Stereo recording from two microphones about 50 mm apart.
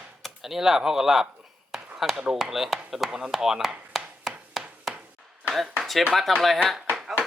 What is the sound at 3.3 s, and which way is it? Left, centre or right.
Chopping, centre.